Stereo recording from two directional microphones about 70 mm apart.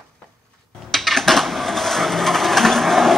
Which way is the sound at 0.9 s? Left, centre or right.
Centre.